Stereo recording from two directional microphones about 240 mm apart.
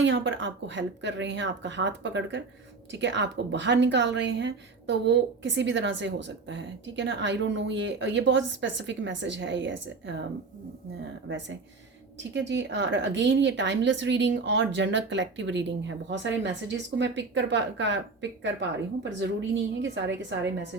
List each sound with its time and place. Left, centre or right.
0.0 s a woman's voice: right
11.3 s a woman's voice: right